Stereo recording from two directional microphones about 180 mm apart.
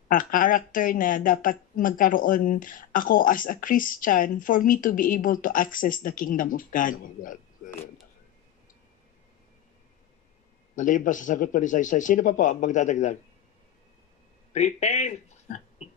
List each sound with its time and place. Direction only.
0.1 s speech: 50° left (ahead or behind)
10.8 s speech: 45° left (ahead or behind)
14.5 s speech: 40° left (ahead or behind)